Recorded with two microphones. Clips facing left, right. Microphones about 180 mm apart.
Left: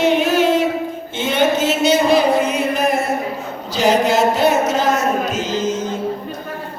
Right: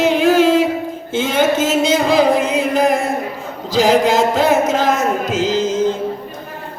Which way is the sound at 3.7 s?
90° right.